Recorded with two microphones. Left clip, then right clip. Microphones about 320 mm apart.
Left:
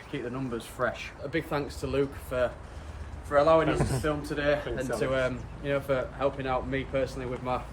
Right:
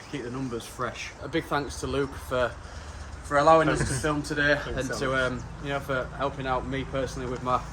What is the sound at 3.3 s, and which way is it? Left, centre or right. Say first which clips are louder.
A man's voice: right 3 dB; right.